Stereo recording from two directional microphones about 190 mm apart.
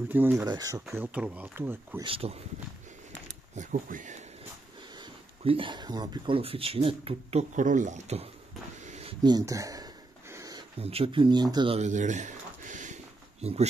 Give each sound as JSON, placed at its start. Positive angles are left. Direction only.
{"t": 0.1, "sound": "speech", "side_deg": -10}
{"t": 0.9, "sound": "speech", "side_deg": -10}
{"t": 2.0, "sound": "speech", "side_deg": -30}
{"t": 3.5, "sound": "speech", "side_deg": -40}
{"t": 4.9, "sound": "speech", "side_deg": -30}
{"t": 8.8, "sound": "a sound", "side_deg": -35}
{"t": 9.2, "sound": "speech", "side_deg": -20}
{"t": 10.3, "sound": "a sound", "side_deg": -20}
{"t": 10.8, "sound": "speech", "side_deg": -30}